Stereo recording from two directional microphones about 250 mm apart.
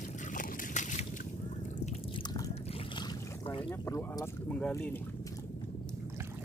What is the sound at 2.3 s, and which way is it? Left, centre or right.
Boat, centre.